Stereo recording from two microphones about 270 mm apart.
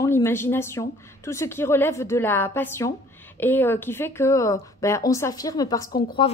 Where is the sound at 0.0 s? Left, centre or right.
Centre.